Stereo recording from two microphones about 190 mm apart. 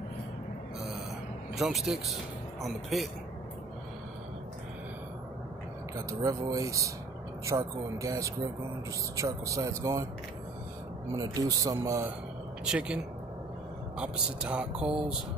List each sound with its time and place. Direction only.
1.5 s speech: centre (ahead or behind)
5.9 s speech: 15° right (ahead or behind)
11.1 s speech: 20° right (ahead or behind)
12.6 s speech: 5° right (ahead or behind)